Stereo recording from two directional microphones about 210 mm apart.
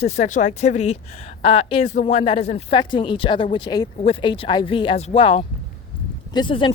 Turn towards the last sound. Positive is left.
turn(degrees=25)  # may be behind; listen again after turning